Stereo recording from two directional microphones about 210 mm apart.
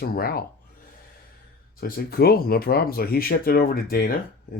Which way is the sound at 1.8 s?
45° left (ahead or behind).